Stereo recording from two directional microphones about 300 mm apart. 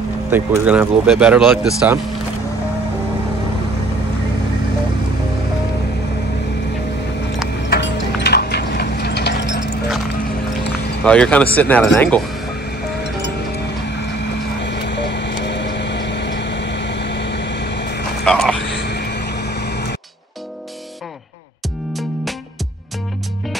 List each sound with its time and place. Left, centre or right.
0.3 s speech: centre
7.6 s ratchet: left
11.1 s speech: centre
13.8 s vehicle: left
18.2 s a sound: centre
18.7 s vehicle: left